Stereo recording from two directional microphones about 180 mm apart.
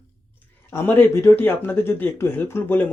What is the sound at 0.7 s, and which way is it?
Speech, 10° left (ahead or behind).